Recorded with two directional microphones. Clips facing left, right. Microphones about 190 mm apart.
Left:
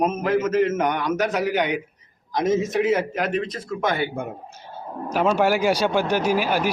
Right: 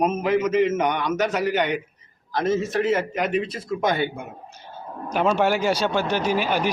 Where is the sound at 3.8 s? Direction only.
20° right (ahead or behind).